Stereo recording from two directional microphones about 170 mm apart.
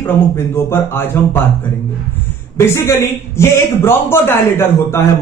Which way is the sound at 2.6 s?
15° left (ahead or behind).